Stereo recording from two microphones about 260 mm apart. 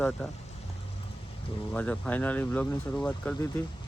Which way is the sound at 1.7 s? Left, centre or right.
Centre.